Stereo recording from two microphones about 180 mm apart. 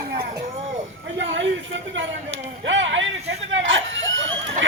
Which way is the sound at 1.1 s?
90° right.